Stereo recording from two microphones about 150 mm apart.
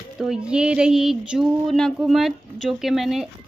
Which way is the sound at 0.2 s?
5° right (ahead or behind).